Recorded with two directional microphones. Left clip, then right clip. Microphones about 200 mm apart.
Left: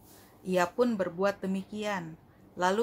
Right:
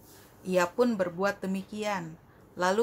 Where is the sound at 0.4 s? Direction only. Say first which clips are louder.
Right 1 dB; 5° right (ahead or behind).